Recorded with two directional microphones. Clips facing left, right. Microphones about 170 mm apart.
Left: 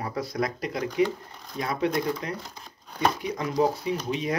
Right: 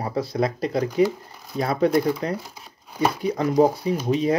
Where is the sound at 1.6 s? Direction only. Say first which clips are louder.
Right 6 dB; 35° right (ahead or behind).